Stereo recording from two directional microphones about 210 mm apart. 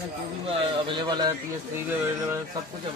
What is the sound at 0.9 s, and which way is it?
Speech, 20° right (ahead or behind).